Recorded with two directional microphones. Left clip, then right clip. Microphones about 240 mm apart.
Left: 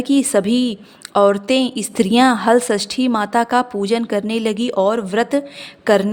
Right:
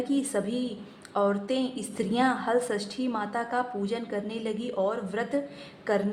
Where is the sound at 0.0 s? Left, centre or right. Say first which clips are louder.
Left 12 dB; left.